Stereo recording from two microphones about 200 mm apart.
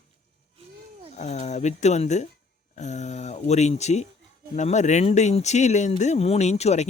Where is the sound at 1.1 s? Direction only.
35° left (ahead or behind).